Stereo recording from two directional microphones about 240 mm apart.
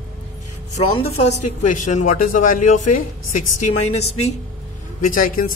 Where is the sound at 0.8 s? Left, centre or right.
Left.